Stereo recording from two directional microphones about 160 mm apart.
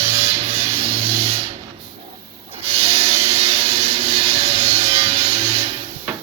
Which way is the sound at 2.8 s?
40° right (ahead or behind).